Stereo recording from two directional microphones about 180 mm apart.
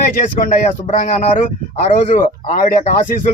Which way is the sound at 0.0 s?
45° left (ahead or behind).